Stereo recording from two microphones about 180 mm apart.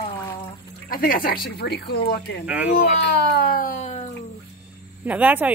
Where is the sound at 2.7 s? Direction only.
60° left (ahead or behind); by 4.0 s 45° left (ahead or behind).